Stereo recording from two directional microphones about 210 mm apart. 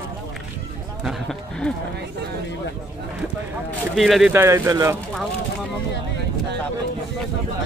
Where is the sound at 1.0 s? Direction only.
5° left (ahead or behind).